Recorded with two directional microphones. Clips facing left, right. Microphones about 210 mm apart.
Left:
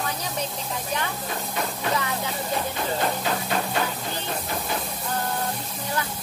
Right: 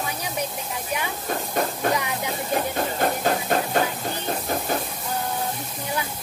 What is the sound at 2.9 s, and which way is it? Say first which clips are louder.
Steam: right 4 dB; 45° right (ahead or behind).